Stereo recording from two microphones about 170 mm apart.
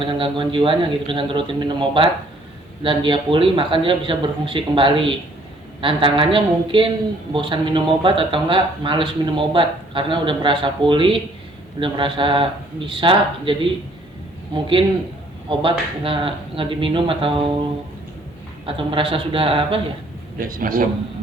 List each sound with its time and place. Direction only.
0.0 s a man's voice: 30° right (ahead or behind)
16.0 s a man's voice: 30° right (ahead or behind)
18.6 s a man's voice: 30° right (ahead or behind)
20.4 s a man's voice: 55° right (ahead or behind)